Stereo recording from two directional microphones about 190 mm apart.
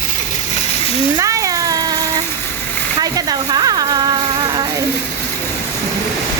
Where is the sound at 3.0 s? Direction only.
20° right (ahead or behind).